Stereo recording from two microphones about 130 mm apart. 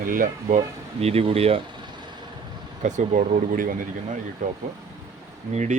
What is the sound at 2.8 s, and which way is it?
Speech, 75° right (ahead or behind).